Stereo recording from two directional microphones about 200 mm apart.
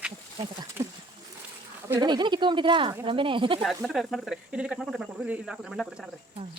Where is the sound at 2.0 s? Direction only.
20° right (ahead or behind).